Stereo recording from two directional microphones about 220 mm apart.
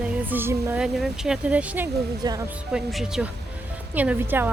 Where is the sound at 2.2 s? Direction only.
15° right (ahead or behind).